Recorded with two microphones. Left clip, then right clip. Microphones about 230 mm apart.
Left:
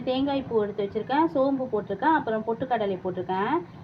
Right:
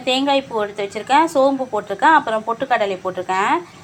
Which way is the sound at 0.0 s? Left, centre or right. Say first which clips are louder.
Right 9 dB; centre.